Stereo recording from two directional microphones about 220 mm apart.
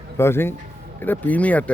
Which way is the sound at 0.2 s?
10° left (ahead or behind).